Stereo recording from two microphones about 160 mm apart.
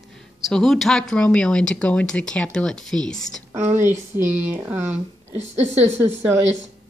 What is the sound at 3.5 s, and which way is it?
Speech, 15° right (ahead or behind).